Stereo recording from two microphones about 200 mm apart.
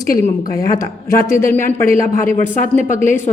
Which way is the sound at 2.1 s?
40° left (ahead or behind).